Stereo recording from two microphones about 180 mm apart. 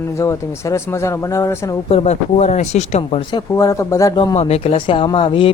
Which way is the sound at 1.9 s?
35° left (ahead or behind).